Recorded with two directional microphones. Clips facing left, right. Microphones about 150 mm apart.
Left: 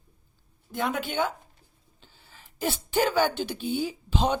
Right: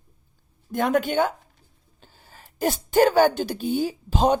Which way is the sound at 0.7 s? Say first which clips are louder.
Right 7 dB; 50° right (ahead or behind).